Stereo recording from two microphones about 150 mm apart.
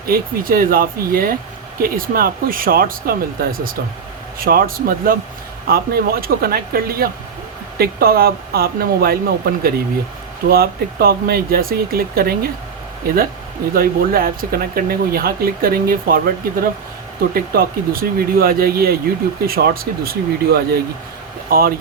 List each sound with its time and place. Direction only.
0.0 s speech: 80° right
5.6 s speech: 90° right
13.7 s speech: 80° right
21.5 s speech: 75° right (ahead or behind)